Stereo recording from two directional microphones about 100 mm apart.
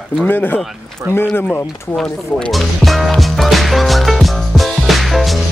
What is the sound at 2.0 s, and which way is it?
Music, 5° left (ahead or behind).